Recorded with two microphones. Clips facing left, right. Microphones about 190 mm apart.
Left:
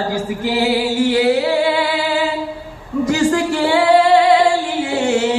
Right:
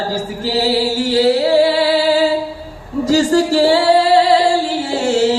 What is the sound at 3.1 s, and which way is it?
Music, 35° right (ahead or behind).